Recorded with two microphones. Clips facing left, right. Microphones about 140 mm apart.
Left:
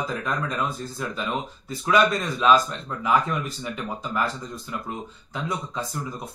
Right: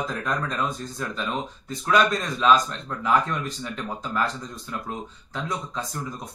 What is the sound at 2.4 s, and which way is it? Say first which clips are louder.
Speech: left 1 dB; 5° left (ahead or behind).